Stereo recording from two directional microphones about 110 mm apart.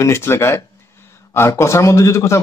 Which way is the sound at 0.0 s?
25° left (ahead or behind).